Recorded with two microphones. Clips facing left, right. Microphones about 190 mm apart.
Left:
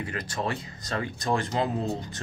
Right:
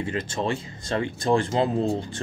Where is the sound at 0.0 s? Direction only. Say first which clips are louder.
Right 4 dB; 25° right (ahead or behind).